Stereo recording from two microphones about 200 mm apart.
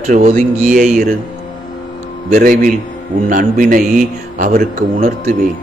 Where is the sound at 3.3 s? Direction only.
45° right (ahead or behind).